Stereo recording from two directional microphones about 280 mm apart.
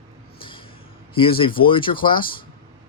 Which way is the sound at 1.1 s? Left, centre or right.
Centre.